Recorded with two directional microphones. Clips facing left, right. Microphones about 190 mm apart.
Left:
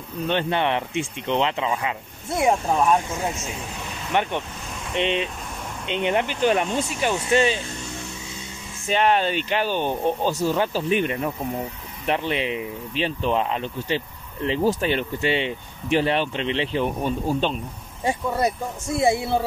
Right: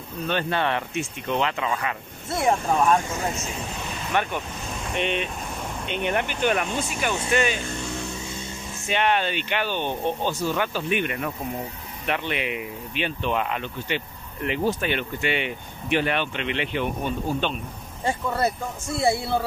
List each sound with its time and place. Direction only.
0.3 s speech: 20° left (ahead or behind)
4.1 s speech: 20° left (ahead or behind)
8.8 s speech: 35° left (ahead or behind)
18.0 s speech: 15° left (ahead or behind)